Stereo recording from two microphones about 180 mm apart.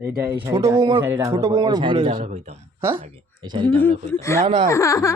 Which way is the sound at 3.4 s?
25° right (ahead or behind).